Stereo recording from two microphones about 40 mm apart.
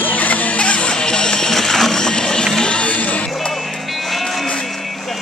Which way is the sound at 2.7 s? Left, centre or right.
Left.